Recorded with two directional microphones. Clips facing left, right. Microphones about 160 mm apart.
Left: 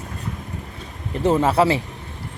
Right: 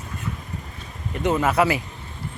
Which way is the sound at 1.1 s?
30° left (ahead or behind).